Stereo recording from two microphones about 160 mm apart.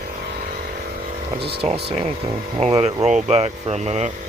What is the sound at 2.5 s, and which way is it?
Speech, 40° right (ahead or behind).